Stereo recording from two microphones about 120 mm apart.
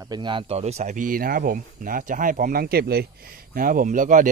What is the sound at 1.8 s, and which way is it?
Speech, 90° right.